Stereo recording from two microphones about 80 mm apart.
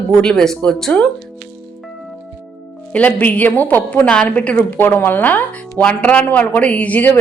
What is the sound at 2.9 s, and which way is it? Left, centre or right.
Speech, centre.